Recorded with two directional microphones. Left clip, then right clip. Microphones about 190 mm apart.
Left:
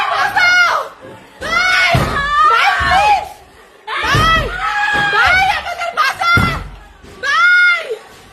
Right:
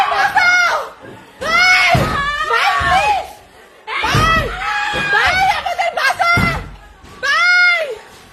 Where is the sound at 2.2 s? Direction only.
20° left (ahead or behind).